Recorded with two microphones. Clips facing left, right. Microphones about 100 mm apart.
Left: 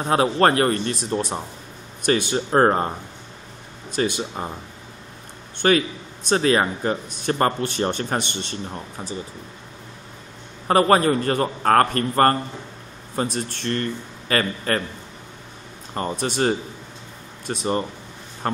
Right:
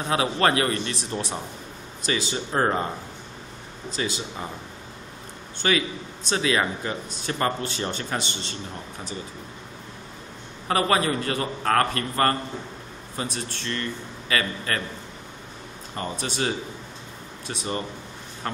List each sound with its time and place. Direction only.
0.0 s a man's voice: 35° left (ahead or behind)
2.0 s speech: 55° left (ahead or behind)
2.5 s speech: 45° left (ahead or behind)
3.9 s speech: 55° left (ahead or behind)
5.6 s speech: 50° left (ahead or behind)
10.7 s a man's voice: 40° left (ahead or behind)
16.2 s a man's voice: 45° left (ahead or behind)